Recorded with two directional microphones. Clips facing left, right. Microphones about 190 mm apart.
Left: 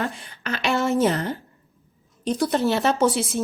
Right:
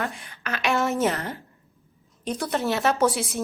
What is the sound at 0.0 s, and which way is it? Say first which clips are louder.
A woman's voice: left 2 dB; 35° left (ahead or behind).